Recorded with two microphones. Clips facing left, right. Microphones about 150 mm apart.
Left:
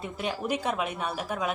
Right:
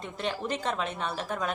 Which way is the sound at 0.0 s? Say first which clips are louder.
Left 1 dB; 10° left (ahead or behind).